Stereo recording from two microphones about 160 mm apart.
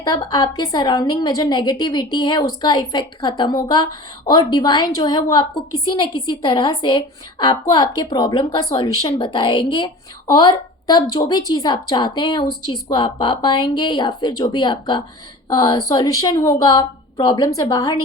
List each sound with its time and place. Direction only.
0.0 s a woman's voice: 25° left (ahead or behind)